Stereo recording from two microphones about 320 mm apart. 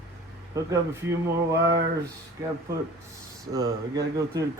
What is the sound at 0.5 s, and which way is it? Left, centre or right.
Speech, centre.